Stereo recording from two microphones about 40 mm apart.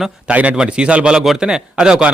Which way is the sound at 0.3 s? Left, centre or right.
Right.